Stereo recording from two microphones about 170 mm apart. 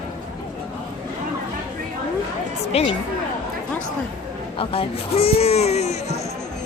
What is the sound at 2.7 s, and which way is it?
Speech, 40° left (ahead or behind).